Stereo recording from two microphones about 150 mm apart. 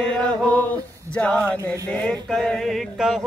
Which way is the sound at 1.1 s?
10° left (ahead or behind).